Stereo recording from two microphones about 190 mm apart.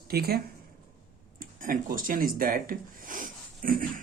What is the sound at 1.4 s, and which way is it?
Speech, 45° right (ahead or behind).